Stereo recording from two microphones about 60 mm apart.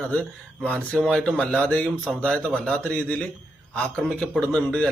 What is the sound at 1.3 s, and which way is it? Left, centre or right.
A man's voice, centre.